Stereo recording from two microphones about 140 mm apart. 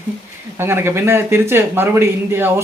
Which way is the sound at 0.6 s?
15° right (ahead or behind).